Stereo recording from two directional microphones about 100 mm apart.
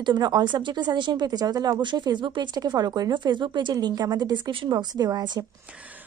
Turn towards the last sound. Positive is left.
turn(degrees=-45)  # may be behind; listen again after turning